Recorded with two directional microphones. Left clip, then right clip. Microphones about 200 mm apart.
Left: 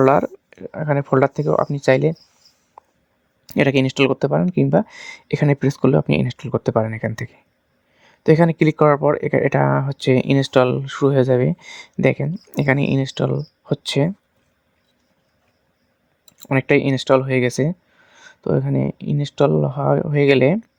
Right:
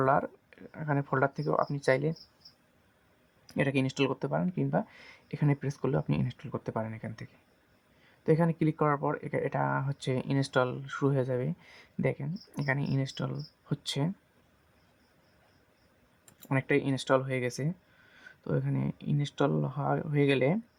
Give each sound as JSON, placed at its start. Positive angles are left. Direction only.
{"t": 0.0, "sound": "speech", "side_deg": 45}
{"t": 3.4, "sound": "speech", "side_deg": 50}
{"t": 16.4, "sound": "speech", "side_deg": 50}